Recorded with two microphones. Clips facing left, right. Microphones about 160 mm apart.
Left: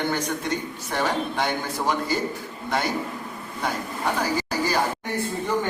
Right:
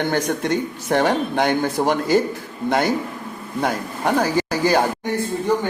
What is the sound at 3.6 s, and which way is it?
A man's voice, 55° right (ahead or behind).